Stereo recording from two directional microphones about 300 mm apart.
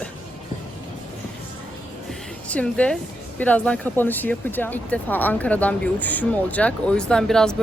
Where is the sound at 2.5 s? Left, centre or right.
Centre.